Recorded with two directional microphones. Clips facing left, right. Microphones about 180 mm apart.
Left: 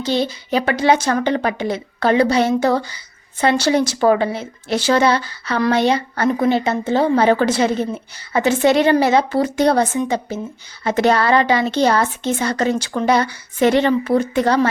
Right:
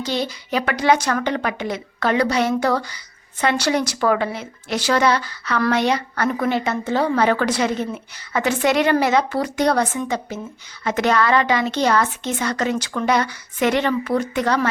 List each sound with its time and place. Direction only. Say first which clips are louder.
0.0 s a woman's voice: left 4 dB; 25° left (ahead or behind)